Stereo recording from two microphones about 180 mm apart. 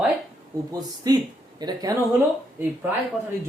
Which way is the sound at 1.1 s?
20° right (ahead or behind).